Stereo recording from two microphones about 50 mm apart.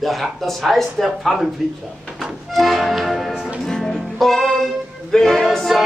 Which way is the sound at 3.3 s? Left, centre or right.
Centre.